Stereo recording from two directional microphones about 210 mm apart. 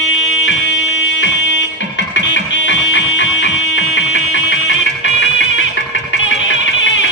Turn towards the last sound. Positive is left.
turn(degrees=65)  # may be behind; listen again after turning